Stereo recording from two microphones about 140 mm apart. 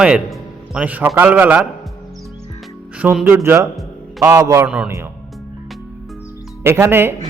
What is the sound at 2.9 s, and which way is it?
A man's voice, 10° right (ahead or behind).